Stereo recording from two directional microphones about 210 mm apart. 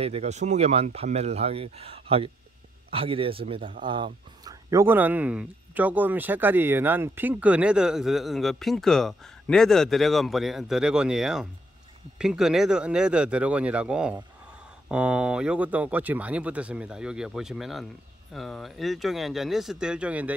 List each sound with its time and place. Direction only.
0.0 s speech: 30° right (ahead or behind); by 20.3 s 5° right (ahead or behind)